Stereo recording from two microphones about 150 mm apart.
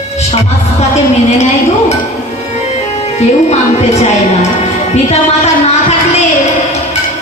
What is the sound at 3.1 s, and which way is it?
Speech, 45° left (ahead or behind).